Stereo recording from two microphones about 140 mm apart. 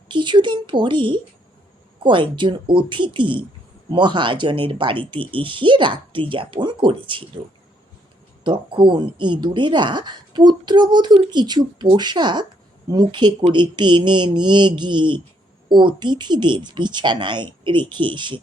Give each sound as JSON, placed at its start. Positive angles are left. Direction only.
{"t": 0.1, "sound": "speech", "side_deg": -35}
{"t": 8.4, "sound": "speech", "side_deg": -35}